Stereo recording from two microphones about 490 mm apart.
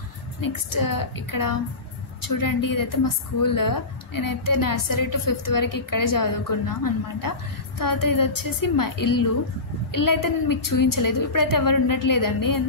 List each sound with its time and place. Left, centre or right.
0.4 s a woman's voice: left